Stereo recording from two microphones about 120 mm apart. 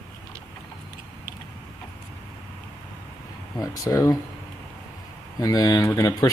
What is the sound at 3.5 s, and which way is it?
Speech, 30° left (ahead or behind).